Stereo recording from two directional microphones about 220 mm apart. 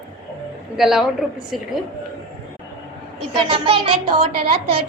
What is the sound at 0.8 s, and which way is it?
Speech, centre (ahead or behind).